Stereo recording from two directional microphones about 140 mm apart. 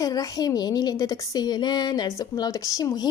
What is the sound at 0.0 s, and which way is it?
A woman's voice, 25° left (ahead or behind).